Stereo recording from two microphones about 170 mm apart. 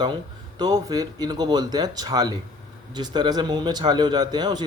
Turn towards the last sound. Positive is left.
turn(degrees=-25)  # may be behind; listen again after turning